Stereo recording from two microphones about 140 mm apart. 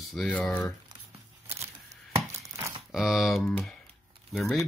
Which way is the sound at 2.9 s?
Centre (ahead or behind).